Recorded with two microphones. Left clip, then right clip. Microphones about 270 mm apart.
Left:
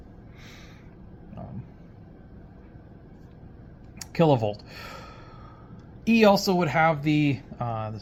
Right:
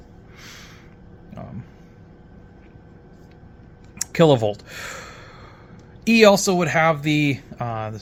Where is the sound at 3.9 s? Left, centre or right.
Right.